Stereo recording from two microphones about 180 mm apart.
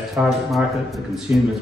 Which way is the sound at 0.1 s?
Centre (ahead or behind).